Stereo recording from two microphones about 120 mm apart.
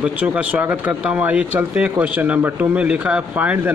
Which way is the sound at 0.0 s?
10° right (ahead or behind).